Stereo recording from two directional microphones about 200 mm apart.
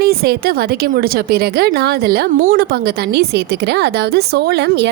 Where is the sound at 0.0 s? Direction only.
50° right (ahead or behind).